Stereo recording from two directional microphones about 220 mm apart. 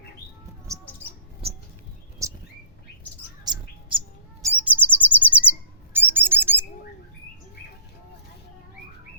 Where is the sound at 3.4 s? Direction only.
20° right (ahead or behind).